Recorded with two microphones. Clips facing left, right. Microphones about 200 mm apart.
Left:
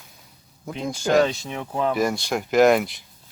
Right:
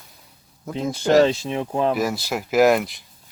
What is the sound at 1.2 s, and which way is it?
Speech, 25° right (ahead or behind).